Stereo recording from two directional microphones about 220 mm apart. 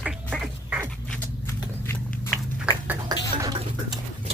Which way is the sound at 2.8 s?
15° right (ahead or behind).